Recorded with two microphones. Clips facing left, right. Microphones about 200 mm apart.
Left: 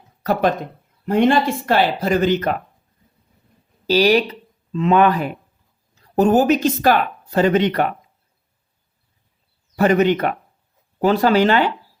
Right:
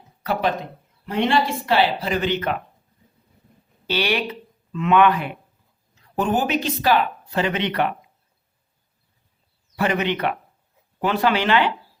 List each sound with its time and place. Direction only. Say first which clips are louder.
0.2 s speech: left 4 dB; 45° left (ahead or behind)
3.8 s speech: left 8 dB; 40° left (ahead or behind)
9.7 s speech: left 7 dB; 45° left (ahead or behind)